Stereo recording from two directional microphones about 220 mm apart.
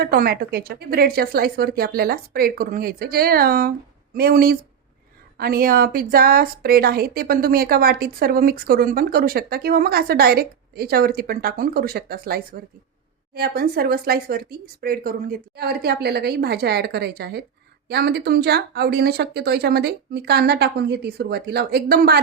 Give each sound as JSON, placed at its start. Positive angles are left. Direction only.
{"t": 0.0, "sound": "a woman's voice", "side_deg": -45}